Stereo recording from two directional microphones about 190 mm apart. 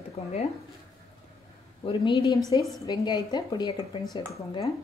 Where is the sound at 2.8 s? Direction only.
20° left (ahead or behind).